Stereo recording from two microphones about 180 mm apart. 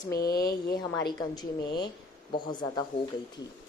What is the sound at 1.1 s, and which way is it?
A woman's voice, 25° left (ahead or behind).